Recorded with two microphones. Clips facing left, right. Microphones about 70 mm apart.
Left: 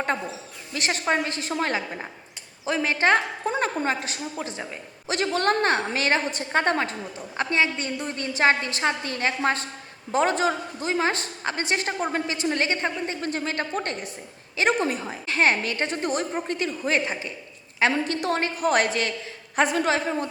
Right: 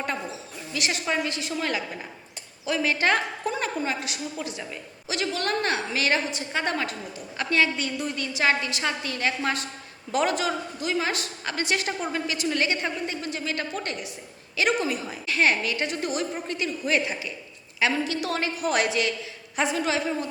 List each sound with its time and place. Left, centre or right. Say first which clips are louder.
0.7 s a woman's voice: left 3 dB; left
5.0 s a woman's voice: left 5 dB; left